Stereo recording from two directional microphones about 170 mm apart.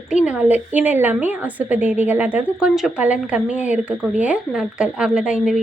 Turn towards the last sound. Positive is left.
turn(degrees=-5)  # may be behind; listen again after turning